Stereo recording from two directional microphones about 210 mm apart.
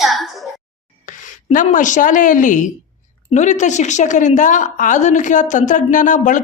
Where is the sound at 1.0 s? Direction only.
40° left (ahead or behind).